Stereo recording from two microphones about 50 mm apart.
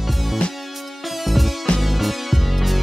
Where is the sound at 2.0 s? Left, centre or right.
Centre.